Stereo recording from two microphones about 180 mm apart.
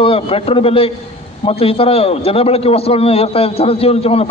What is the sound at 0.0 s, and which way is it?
A man's voice, 30° left (ahead or behind).